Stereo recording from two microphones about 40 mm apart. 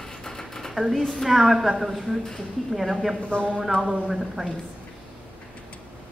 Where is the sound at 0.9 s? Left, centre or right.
Centre.